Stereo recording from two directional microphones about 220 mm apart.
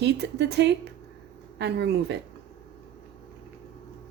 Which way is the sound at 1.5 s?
50° right (ahead or behind).